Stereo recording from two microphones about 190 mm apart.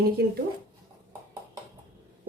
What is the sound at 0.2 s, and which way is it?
Speech, 55° right (ahead or behind).